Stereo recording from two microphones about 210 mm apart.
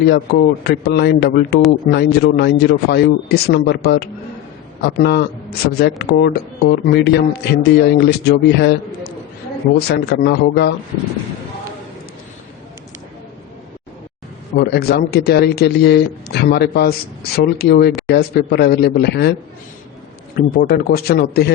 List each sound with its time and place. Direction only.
0.1 s speech: 50° left (ahead or behind)
14.5 s speech: 50° left (ahead or behind)
20.3 s speech: 45° left (ahead or behind)